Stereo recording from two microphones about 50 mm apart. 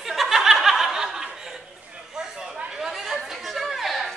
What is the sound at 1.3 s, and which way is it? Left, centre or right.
Chuckle, centre.